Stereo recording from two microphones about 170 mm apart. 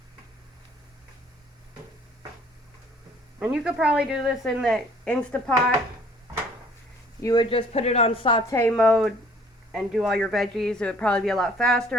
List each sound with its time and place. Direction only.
3.4 s speech: 5° right (ahead or behind)
7.2 s speech: 20° left (ahead or behind)
7.5 s speech: 40° left (ahead or behind)
8.4 s speech: 15° left (ahead or behind)